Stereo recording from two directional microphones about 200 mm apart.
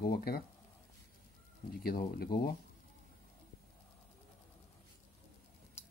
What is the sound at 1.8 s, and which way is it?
Speech, 45° left (ahead or behind).